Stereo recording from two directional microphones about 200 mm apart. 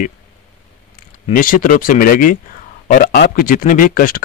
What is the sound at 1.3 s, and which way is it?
Speech, 45° left (ahead or behind).